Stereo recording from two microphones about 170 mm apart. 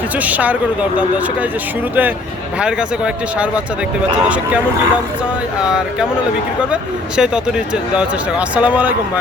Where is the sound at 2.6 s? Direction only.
5° right (ahead or behind).